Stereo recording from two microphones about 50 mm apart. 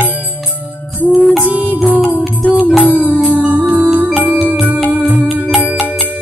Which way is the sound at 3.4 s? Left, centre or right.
Right.